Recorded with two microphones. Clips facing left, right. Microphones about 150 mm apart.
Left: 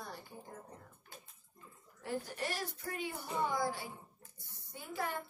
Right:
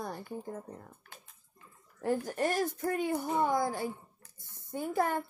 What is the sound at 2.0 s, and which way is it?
A woman's voice, 50° right (ahead or behind).